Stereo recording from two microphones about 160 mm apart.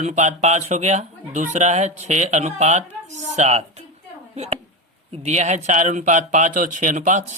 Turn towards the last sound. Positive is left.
turn(degrees=-50)  # may be behind; listen again after turning